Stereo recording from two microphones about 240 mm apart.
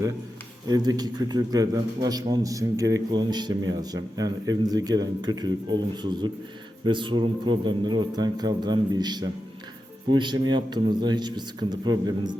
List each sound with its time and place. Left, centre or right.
0.7 s a man's voice: centre